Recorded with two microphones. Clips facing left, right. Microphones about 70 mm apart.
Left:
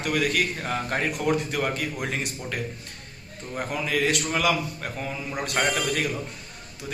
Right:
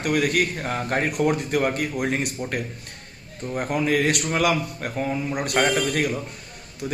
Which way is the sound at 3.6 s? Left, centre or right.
Right.